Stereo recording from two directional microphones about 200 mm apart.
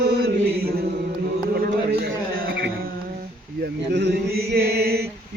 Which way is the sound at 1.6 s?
50° right (ahead or behind).